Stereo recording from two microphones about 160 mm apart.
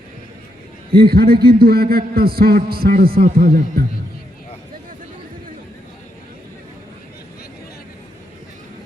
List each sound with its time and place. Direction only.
0.9 s a man's voice: 70° right (ahead or behind)